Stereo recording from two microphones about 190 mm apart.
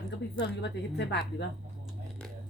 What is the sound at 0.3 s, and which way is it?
Speech, 65° left (ahead or behind).